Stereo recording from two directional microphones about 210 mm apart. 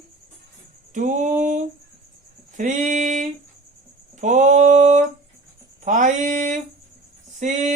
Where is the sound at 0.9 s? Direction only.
35° right (ahead or behind).